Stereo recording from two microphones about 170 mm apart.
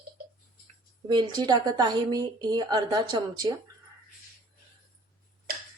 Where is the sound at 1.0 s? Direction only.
25° right (ahead or behind).